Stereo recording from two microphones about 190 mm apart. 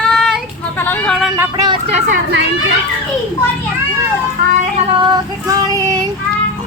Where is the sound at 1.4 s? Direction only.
20° right (ahead or behind).